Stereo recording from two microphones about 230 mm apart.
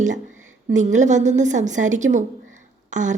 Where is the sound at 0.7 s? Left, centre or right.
Right.